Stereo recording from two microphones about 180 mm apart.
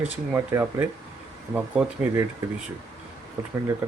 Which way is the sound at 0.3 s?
10° right (ahead or behind).